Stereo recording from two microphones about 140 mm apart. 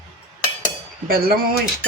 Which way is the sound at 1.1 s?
90° right.